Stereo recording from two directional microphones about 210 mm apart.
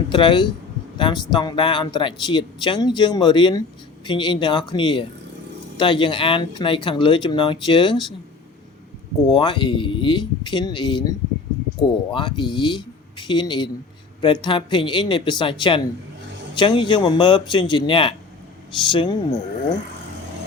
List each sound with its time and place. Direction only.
0.1 s speech: 20° left (ahead or behind)
9.2 s speech: 20° left (ahead or behind)